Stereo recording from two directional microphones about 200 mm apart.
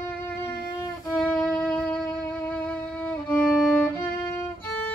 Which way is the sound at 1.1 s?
5° left (ahead or behind).